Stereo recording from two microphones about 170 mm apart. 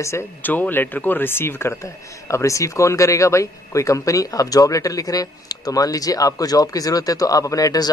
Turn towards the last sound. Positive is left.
turn(degrees=20)  # may be behind; listen again after turning